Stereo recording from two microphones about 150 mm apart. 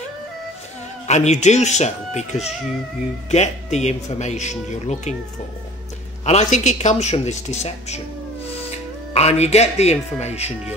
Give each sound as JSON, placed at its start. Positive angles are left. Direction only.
{"t": 1.0, "sound": "speech", "side_deg": 50}
{"t": 6.2, "sound": "speech", "side_deg": 50}
{"t": 9.1, "sound": "speech", "side_deg": 45}